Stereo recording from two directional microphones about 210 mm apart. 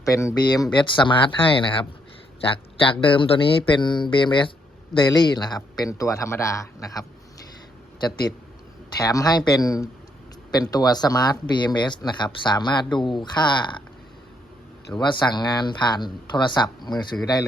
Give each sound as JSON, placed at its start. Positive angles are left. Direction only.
{"t": 0.0, "sound": "speech", "side_deg": 15}
{"t": 9.0, "sound": "speech", "side_deg": 15}
{"t": 14.9, "sound": "speech", "side_deg": 20}